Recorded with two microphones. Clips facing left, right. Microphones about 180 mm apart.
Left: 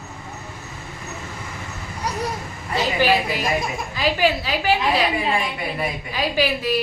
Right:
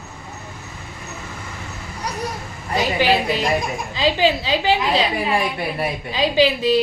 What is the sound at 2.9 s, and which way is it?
A woman's voice, 20° right (ahead or behind).